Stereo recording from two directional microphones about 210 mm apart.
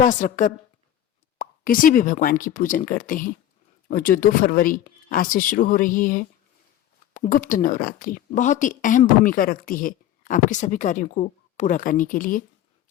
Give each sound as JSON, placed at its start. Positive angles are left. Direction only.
{"t": 0.0, "sound": "speech", "side_deg": 40}